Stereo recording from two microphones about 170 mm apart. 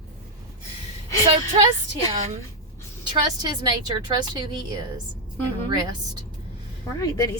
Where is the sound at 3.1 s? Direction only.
25° right (ahead or behind).